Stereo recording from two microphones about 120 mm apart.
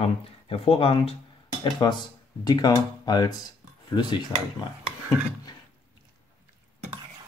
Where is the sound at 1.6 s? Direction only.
40° left (ahead or behind).